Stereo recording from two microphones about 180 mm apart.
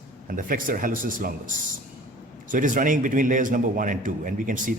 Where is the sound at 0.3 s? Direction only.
50° right (ahead or behind).